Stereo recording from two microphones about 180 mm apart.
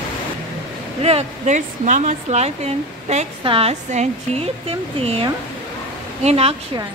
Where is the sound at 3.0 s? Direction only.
35° right (ahead or behind).